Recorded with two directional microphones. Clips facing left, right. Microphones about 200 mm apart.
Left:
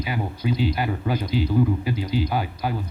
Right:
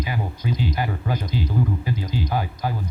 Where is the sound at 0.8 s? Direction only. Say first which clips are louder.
Left 2 dB; 15° left (ahead or behind).